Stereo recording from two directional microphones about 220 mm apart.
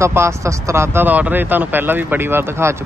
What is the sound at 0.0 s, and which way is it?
Speech, 10° right (ahead or behind).